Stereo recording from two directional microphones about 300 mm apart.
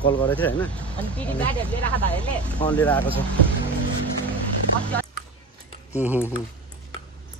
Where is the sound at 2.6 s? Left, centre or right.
Centre.